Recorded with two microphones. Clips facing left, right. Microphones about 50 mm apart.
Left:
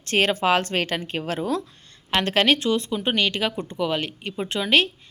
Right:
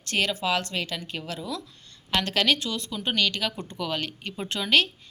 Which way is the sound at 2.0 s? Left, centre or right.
Left.